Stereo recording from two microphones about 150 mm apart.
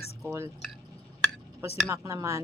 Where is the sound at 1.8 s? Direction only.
20° right (ahead or behind).